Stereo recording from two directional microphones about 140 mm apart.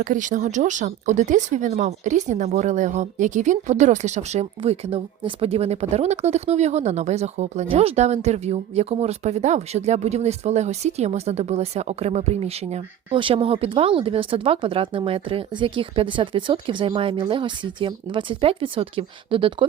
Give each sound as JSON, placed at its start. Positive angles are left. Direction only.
{"t": 0.0, "sound": "speech", "side_deg": -65}